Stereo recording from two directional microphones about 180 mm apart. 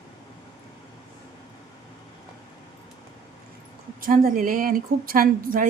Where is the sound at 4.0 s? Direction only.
50° right (ahead or behind).